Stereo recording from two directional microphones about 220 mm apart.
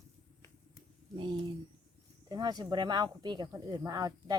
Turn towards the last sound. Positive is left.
turn(degrees=-15)  # may be behind; listen again after turning